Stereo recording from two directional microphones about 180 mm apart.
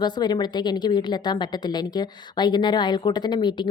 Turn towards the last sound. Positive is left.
turn(degrees=25)  # may be behind; listen again after turning